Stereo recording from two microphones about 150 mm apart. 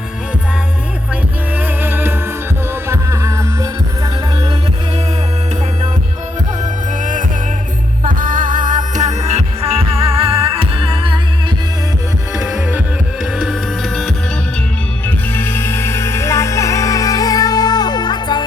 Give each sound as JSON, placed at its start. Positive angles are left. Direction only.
{"t": 1.8, "sound": "music", "side_deg": -15}
{"t": 7.0, "sound": "music", "side_deg": -60}
{"t": 12.4, "sound": "music", "side_deg": -5}
{"t": 15.0, "sound": "music", "side_deg": 15}